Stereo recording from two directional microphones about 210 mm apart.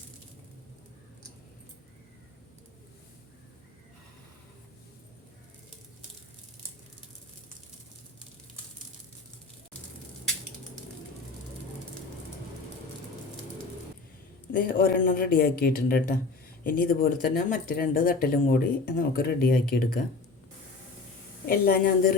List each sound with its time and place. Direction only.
14.5 s speech: 40° left (ahead or behind)
21.4 s speech: 45° left (ahead or behind)